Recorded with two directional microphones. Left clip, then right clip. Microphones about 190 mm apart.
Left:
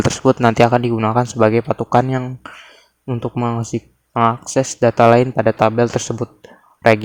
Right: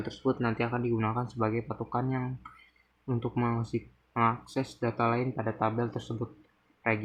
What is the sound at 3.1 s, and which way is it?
Speech, 40° left (ahead or behind).